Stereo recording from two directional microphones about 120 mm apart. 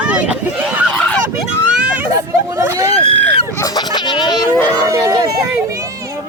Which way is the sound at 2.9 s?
50° left (ahead or behind).